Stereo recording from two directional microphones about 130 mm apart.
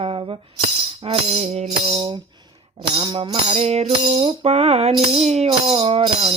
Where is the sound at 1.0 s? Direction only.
55° right (ahead or behind).